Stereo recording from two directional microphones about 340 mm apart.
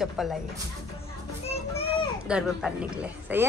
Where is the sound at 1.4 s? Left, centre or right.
Centre.